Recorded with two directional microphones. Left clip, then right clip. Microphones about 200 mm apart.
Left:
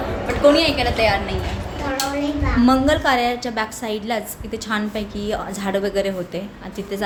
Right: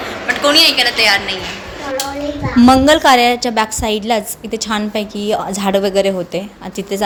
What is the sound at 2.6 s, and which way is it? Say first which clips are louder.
A woman's voice: right 9 dB; 35° right (ahead or behind).